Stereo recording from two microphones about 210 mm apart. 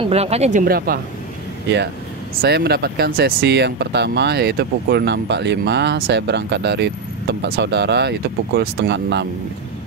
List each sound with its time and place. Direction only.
0.0 s speech: 30° right (ahead or behind); by 1.0 s 45° right (ahead or behind)
2.4 s speech: 50° right (ahead or behind)